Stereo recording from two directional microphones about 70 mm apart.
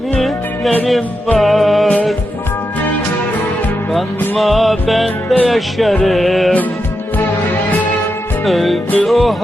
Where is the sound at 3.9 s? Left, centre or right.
Centre.